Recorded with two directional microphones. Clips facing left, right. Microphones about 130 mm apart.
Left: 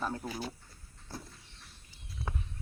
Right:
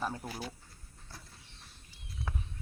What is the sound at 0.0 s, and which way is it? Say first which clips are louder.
Speech: left 1 dB; 5° right (ahead or behind).